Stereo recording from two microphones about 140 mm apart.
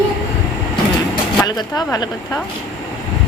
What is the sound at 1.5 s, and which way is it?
Speech, 30° left (ahead or behind).